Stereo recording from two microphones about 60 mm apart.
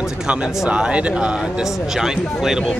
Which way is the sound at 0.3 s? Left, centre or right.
Centre.